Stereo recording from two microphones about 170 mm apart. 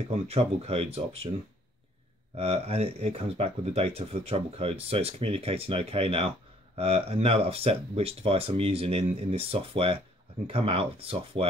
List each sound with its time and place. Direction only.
0.1 s speech: 35° right (ahead or behind)
2.3 s speech: 35° right (ahead or behind)